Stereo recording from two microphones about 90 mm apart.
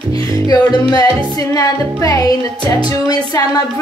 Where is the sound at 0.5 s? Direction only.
50° left (ahead or behind).